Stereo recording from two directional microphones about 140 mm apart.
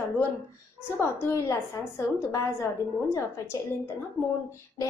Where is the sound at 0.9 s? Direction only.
15° left (ahead or behind).